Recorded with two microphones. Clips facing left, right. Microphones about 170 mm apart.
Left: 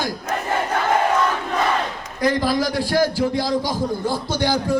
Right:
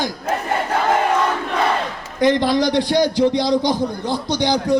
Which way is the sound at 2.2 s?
25° right (ahead or behind).